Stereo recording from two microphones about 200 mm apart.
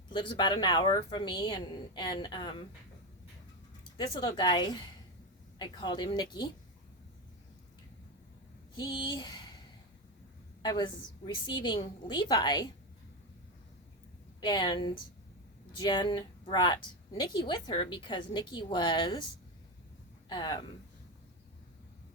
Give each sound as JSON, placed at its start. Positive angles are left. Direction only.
{"t": 0.1, "sound": "a woman's voice", "side_deg": 20}
{"t": 3.9, "sound": "a woman's voice", "side_deg": 20}
{"t": 8.7, "sound": "speech", "side_deg": 25}
{"t": 10.6, "sound": "a woman's voice", "side_deg": 20}
{"t": 14.4, "sound": "a woman's voice", "side_deg": 25}
{"t": 20.2, "sound": "speech", "side_deg": 20}